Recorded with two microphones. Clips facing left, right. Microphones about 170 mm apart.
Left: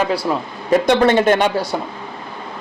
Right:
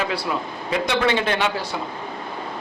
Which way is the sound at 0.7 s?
45° left (ahead or behind).